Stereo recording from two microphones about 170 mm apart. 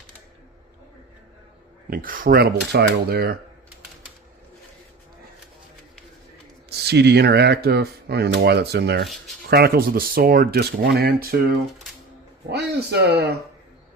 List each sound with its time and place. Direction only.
1.9 s speech: 55° right (ahead or behind)
6.7 s speech: 75° right (ahead or behind)
12.5 s speech: 75° right (ahead or behind)